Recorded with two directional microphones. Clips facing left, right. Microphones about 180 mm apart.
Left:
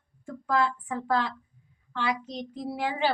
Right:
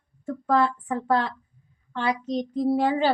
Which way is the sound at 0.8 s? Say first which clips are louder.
Right 4 dB; 45° right (ahead or behind).